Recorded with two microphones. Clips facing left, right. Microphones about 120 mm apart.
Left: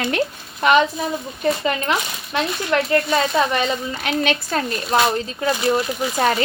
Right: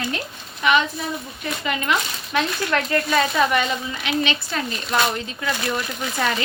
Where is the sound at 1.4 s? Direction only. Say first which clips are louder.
Left 7 dB; 35° left (ahead or behind).